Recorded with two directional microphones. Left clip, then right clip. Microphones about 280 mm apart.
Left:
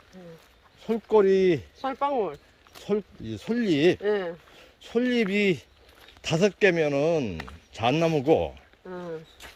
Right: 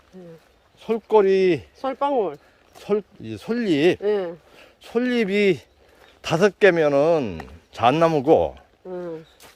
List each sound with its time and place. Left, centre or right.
0.8 s speech: centre
1.8 s speech: right
2.7 s speech: centre
4.0 s speech: right
4.5 s speech: centre